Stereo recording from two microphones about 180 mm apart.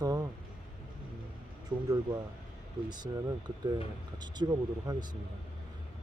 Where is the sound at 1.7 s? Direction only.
10° right (ahead or behind).